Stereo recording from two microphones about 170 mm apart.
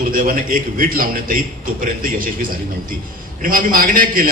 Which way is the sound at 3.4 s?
55° right (ahead or behind).